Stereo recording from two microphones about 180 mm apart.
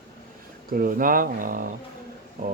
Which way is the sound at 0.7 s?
55° right (ahead or behind).